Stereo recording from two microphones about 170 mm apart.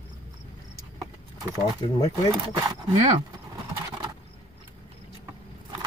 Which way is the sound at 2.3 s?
25° right (ahead or behind).